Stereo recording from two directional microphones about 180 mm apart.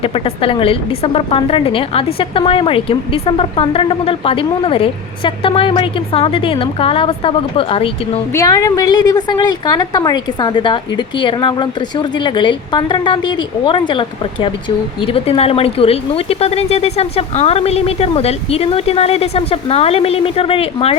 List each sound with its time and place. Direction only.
0.0 s a woman's voice: 30° left (ahead or behind)
8.4 s a woman's voice: 20° left (ahead or behind)
15.0 s speech: 30° left (ahead or behind)